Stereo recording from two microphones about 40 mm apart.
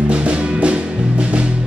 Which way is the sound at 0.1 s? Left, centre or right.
Right.